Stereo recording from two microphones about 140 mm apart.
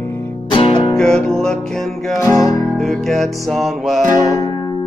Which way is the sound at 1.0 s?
5° left (ahead or behind).